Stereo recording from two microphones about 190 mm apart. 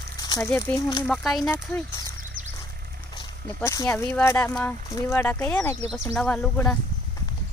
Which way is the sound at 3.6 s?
15° left (ahead or behind).